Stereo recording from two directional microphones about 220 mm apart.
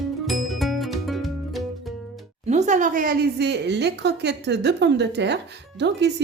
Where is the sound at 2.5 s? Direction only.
30° right (ahead or behind); by 5.4 s 50° right (ahead or behind).